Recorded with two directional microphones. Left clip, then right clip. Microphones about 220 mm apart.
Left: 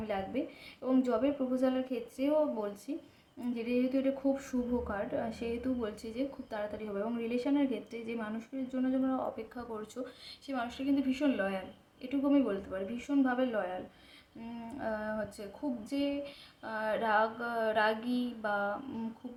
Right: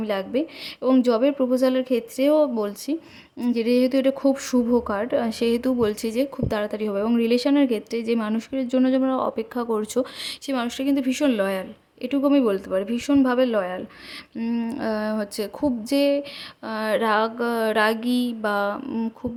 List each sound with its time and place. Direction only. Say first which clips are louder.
0.0 s a woman's voice: right 11 dB; 50° right (ahead or behind)